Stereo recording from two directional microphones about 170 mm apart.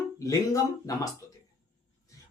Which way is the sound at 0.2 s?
20° left (ahead or behind).